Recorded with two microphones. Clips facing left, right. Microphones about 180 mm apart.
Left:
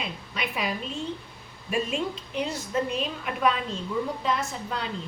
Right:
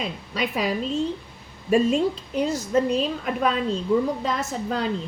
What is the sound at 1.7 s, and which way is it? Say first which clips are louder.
A woman's voice: right 9 dB; 35° right (ahead or behind).